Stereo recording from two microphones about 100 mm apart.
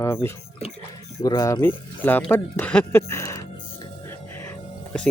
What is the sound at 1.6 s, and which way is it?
Speech, 20° left (ahead or behind).